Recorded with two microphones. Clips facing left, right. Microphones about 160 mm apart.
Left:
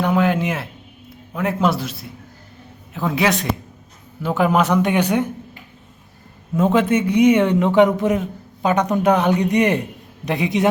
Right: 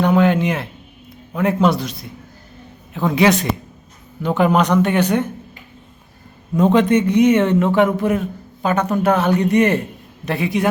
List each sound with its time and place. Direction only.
0.0 s a sound: 5° left (ahead or behind)
1.4 s a man's voice: 5° left (ahead or behind)
6.6 s a man's voice: 5° left (ahead or behind)